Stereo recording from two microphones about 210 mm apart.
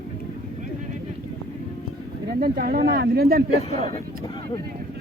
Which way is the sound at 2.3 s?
45° right (ahead or behind).